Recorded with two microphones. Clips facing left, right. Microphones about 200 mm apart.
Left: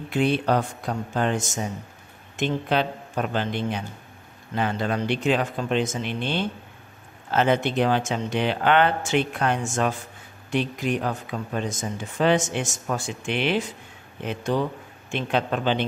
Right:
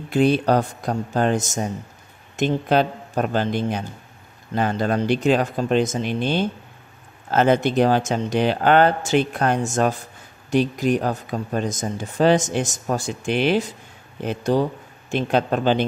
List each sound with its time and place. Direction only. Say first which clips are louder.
0.1 s speech: right 4 dB; 40° right (ahead or behind)